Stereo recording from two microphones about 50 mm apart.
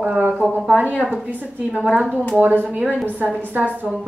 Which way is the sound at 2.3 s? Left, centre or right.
Right.